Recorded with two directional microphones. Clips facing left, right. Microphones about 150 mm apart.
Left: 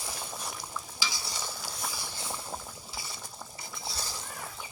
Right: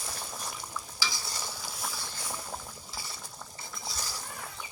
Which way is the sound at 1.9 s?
15° left (ahead or behind).